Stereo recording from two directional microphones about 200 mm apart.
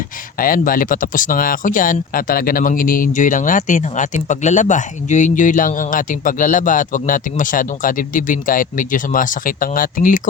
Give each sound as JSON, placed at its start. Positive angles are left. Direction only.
{"t": 0.3, "sound": "speech", "side_deg": 45}